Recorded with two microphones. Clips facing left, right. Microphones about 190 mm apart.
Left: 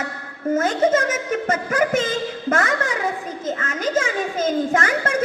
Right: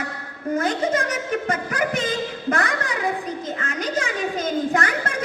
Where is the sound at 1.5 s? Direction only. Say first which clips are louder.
Left 4 dB; 45° left (ahead or behind).